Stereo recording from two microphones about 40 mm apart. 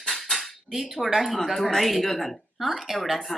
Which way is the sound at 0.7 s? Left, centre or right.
Centre.